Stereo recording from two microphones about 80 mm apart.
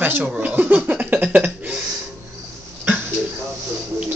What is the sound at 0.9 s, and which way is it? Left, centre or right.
Cough, centre.